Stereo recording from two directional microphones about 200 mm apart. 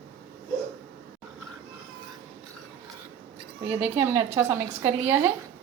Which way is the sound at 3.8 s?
15° right (ahead or behind).